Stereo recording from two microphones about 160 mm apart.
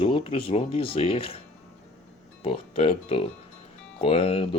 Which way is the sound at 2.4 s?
35° left (ahead or behind).